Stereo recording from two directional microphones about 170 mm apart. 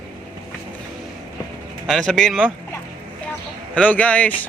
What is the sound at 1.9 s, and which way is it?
Speech, centre (ahead or behind).